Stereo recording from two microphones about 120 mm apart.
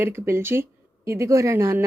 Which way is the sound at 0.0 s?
20° right (ahead or behind).